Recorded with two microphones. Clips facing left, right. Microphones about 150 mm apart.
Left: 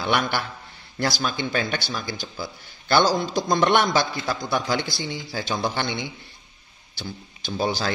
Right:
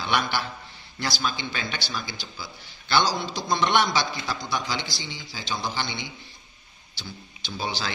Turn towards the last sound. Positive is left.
turn(degrees=45)  # may be behind; listen again after turning